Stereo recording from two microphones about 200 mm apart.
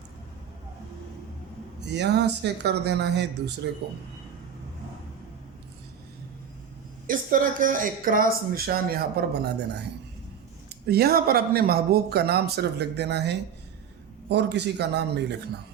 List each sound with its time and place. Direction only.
1.9 s speech: 60° right (ahead or behind)
7.1 s speech: 40° right (ahead or behind)
10.8 s speech: 50° right (ahead or behind)